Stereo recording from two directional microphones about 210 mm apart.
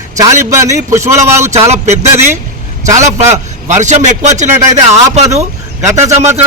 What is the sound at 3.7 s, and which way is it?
Speech, 35° right (ahead or behind).